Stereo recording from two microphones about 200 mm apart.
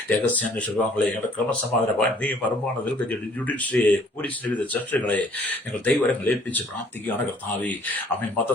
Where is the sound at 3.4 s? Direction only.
5° left (ahead or behind).